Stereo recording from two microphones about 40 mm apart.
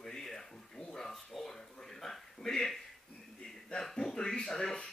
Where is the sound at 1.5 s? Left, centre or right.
Centre.